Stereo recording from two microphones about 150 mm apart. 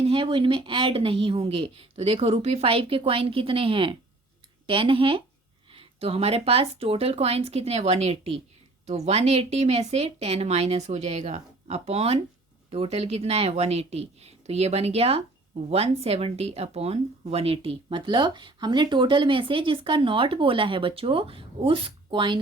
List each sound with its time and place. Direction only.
0.0 s speech: 35° right (ahead or behind)